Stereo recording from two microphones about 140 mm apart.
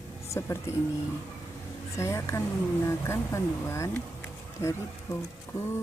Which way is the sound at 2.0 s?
20° left (ahead or behind).